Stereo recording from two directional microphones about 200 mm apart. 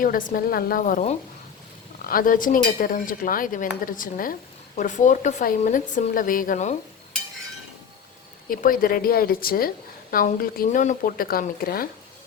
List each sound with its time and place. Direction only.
0.0 s a woman's voice: 45° left (ahead or behind)
8.4 s a woman's voice: 45° left (ahead or behind)